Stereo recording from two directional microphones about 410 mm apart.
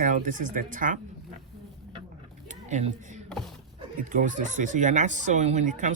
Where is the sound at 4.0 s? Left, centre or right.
Centre.